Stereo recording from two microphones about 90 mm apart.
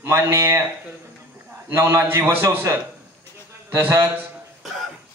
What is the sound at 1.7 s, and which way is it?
A man's voice, 30° right (ahead or behind).